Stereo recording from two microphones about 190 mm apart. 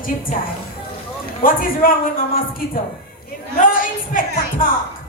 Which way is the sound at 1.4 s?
45° left (ahead or behind).